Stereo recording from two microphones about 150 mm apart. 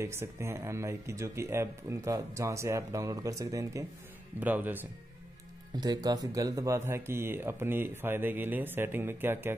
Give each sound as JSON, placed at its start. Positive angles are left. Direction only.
{"t": 0.0, "sound": "speech", "side_deg": -20}
{"t": 4.4, "sound": "speech", "side_deg": -10}
{"t": 5.8, "sound": "speech", "side_deg": -25}